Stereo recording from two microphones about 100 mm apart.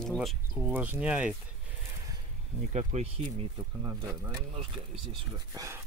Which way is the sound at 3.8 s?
35° right (ahead or behind).